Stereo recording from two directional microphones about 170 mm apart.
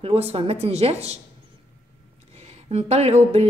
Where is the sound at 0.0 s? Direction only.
35° right (ahead or behind).